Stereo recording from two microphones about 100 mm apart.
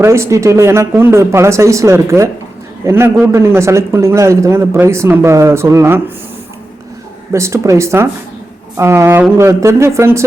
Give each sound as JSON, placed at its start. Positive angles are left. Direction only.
{"t": 0.0, "sound": "a man's voice", "side_deg": -30}
{"t": 7.3, "sound": "a man's voice", "side_deg": -30}